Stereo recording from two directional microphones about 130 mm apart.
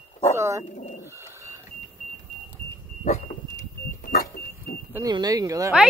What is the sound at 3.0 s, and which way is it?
Vehicle, 70° left (ahead or behind).